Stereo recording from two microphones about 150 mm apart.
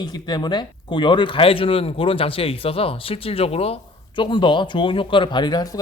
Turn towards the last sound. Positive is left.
turn(degrees=30)  # may be behind; listen again after turning